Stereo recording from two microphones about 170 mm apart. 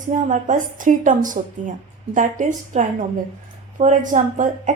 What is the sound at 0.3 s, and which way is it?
A woman's voice, 50° right (ahead or behind).